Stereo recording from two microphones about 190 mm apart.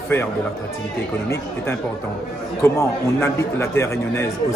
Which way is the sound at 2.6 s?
15° left (ahead or behind).